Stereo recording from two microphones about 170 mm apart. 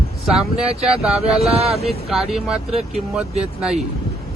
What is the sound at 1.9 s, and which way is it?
Speech, centre (ahead or behind).